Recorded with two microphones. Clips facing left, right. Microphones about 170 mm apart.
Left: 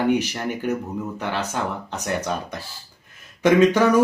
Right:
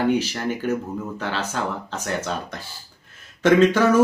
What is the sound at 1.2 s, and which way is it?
Speech, 15° left (ahead or behind).